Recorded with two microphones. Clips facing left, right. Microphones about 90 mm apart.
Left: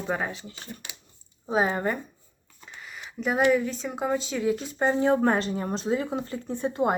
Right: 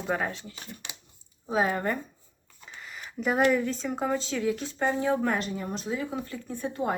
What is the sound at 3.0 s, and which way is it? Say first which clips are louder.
Speech: even; centre (ahead or behind).